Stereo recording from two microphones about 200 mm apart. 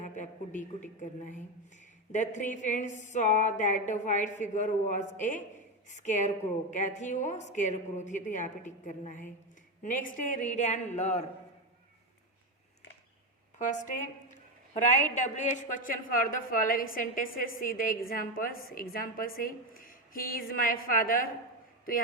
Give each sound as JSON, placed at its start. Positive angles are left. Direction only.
{"t": 0.0, "sound": "a man's voice", "side_deg": 40}
{"t": 2.1, "sound": "a woman's voice", "side_deg": 40}
{"t": 13.6, "sound": "a woman's voice", "side_deg": 40}